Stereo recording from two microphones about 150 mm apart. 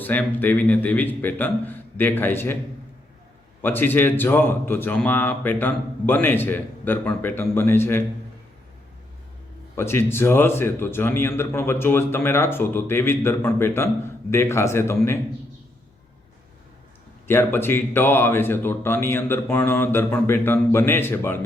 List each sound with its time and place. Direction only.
0.0 s speech: 10° left (ahead or behind)
3.6 s speech: 15° left (ahead or behind)
9.7 s speech: 15° left (ahead or behind)
17.2 s speech: 15° left (ahead or behind)